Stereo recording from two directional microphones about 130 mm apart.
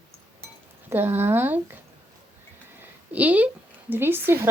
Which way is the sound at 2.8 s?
10° right (ahead or behind).